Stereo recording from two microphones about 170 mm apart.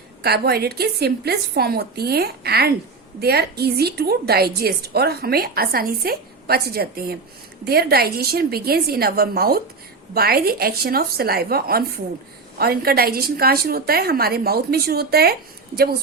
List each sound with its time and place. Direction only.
0.2 s a woman's voice: 70° right (ahead or behind)